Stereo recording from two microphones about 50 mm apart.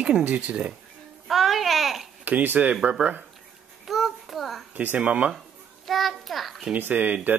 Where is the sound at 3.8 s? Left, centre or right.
Centre.